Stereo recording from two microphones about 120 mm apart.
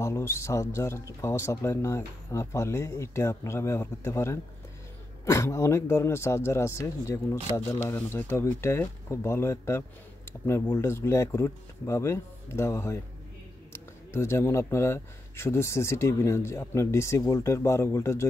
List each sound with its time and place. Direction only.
0.0 s speech: 25° left (ahead or behind)
14.1 s speech: 20° left (ahead or behind)